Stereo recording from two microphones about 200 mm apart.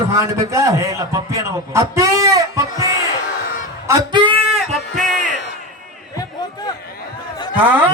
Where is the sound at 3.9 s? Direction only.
20° right (ahead or behind).